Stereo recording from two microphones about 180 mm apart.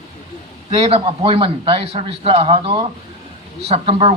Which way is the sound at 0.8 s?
30° right (ahead or behind).